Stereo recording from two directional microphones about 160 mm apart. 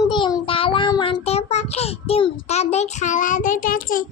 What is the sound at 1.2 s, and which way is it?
A child's voice, 40° left (ahead or behind).